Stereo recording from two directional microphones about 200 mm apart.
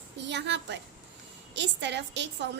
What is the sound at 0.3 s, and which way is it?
A woman's voice, 60° right (ahead or behind).